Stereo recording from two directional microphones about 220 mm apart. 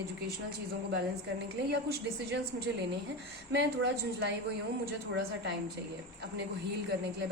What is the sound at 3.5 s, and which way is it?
A woman's voice, 50° right (ahead or behind).